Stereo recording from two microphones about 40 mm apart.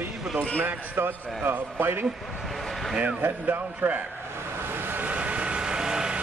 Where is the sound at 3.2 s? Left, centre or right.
Right.